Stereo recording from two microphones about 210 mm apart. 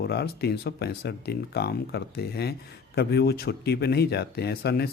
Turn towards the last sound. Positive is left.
turn(degrees=50)  # may be behind; listen again after turning